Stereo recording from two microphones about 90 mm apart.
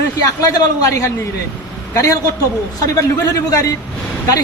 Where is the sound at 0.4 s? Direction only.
40° left (ahead or behind).